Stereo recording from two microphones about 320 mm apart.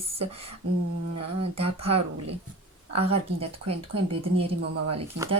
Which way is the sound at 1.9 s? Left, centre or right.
Right.